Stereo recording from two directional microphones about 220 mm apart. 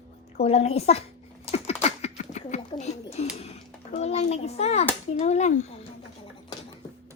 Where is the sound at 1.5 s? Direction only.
30° left (ahead or behind).